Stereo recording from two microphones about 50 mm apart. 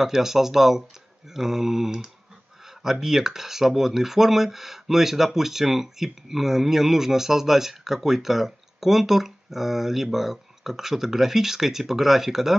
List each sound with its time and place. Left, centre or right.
0.0 s speech: centre